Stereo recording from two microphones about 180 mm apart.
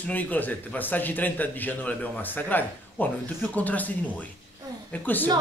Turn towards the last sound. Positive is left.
turn(degrees=10)  # may be behind; listen again after turning